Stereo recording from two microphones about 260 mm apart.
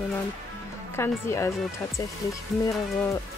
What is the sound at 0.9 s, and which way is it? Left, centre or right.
Speech, centre.